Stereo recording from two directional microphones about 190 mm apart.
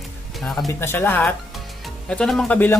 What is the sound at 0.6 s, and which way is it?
Speech, 10° left (ahead or behind).